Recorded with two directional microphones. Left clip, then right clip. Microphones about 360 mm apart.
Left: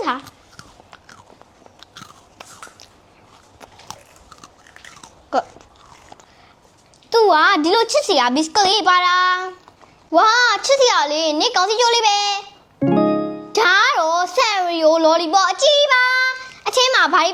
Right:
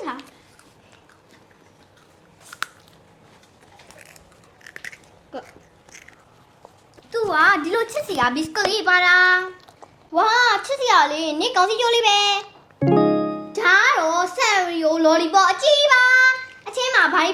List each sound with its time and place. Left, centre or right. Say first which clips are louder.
3.9 s biting: left 10 dB; left
7.1 s a child's voice: left 4 dB; left
13.5 s music: left 2 dB; left